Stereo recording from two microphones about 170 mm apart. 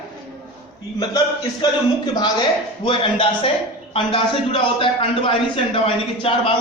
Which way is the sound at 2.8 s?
30° left (ahead or behind).